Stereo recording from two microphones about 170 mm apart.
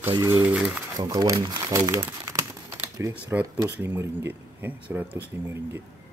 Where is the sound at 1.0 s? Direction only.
20° right (ahead or behind).